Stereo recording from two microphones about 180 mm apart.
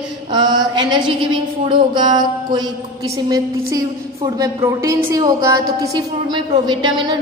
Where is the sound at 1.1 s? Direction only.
30° right (ahead or behind).